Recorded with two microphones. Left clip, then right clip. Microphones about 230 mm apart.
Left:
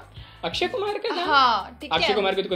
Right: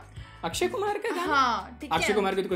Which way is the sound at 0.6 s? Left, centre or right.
Right.